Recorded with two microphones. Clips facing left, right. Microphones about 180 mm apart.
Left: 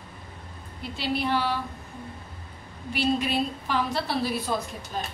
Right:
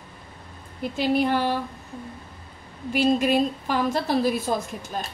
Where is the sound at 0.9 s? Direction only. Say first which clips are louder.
Right 5 dB; 50° right (ahead or behind).